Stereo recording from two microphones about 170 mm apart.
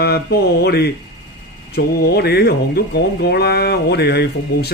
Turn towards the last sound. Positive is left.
turn(degrees=75)  # may be behind; listen again after turning